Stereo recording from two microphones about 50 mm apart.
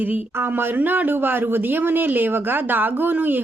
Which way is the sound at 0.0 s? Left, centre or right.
Right.